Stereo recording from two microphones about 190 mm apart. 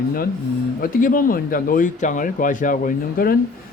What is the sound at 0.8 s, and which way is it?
Speech, 45° left (ahead or behind).